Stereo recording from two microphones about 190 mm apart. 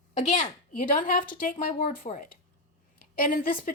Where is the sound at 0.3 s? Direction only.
45° left (ahead or behind).